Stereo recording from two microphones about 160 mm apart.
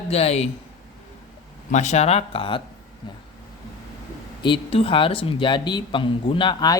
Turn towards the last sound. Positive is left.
turn(degrees=25)  # may be behind; listen again after turning